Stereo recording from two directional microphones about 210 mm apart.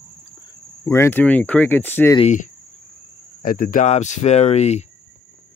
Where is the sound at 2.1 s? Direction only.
35° left (ahead or behind).